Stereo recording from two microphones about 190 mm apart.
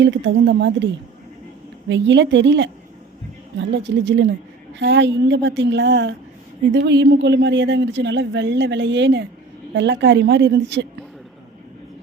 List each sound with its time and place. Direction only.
0.0 s speech: 70° right (ahead or behind)
1.9 s speech: 70° right (ahead or behind)